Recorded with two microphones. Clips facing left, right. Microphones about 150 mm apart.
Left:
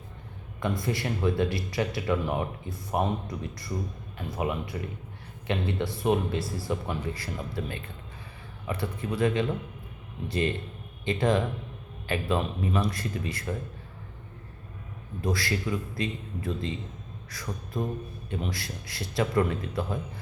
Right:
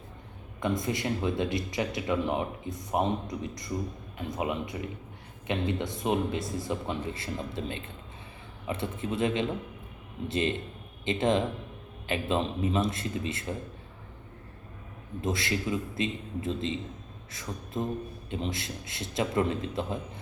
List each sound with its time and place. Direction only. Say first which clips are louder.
0.6 s a man's voice: even; 20° right (ahead or behind)
15.2 s speech: left 1 dB; 20° right (ahead or behind)